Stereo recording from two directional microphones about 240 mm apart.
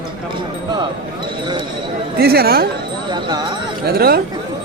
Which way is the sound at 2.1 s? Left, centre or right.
Right.